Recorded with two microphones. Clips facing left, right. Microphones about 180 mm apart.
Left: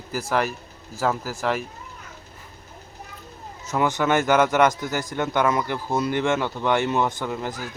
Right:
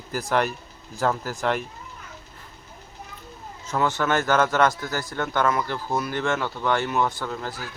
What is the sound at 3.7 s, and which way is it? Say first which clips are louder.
A man's voice: left 2 dB; 15° left (ahead or behind).